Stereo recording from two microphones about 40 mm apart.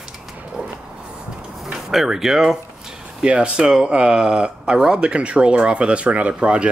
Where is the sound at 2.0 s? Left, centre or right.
Centre.